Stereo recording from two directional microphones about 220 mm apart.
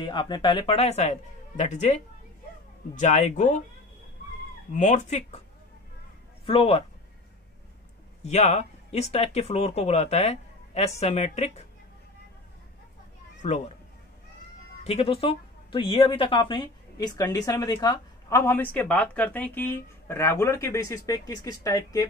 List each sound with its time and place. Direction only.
0.0 s speech: 20° left (ahead or behind)
3.0 s speech: 30° left (ahead or behind)
4.7 s speech: 30° left (ahead or behind)
6.4 s speech: 25° left (ahead or behind)
8.2 s speech: 30° left (ahead or behind)
13.4 s speech: 30° left (ahead or behind)
14.8 s a woman's voice: 25° left (ahead or behind)